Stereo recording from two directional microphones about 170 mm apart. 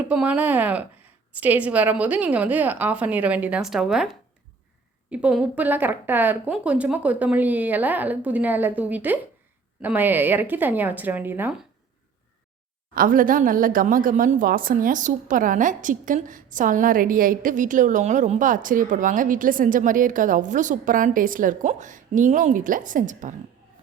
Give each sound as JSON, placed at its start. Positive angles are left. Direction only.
{"t": 0.1, "sound": "a woman's voice", "side_deg": -5}
{"t": 12.9, "sound": "a woman's voice", "side_deg": -55}